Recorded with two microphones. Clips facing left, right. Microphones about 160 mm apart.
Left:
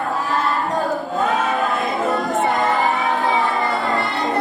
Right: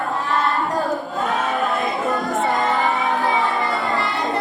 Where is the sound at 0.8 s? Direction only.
Centre (ahead or behind).